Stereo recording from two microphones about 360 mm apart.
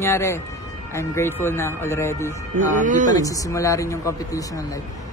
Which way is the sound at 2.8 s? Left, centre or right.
Right.